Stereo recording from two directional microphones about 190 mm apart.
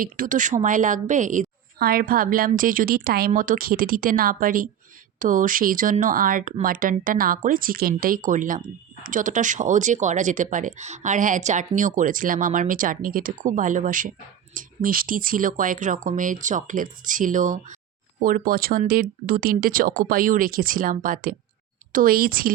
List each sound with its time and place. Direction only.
0.0 s speech: 45° right (ahead or behind)